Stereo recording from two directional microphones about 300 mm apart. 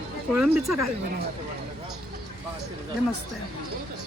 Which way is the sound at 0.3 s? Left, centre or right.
Centre.